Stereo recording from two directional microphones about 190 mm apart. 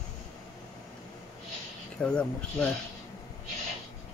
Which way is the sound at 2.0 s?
5° left (ahead or behind).